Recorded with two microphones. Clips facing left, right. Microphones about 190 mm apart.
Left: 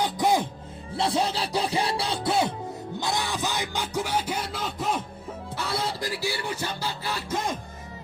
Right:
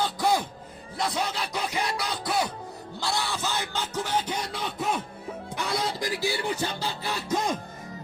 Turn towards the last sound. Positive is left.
turn(degrees=-15)  # may be behind; listen again after turning